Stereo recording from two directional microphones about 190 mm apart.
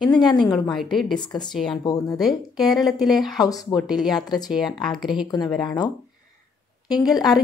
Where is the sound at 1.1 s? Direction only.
25° left (ahead or behind).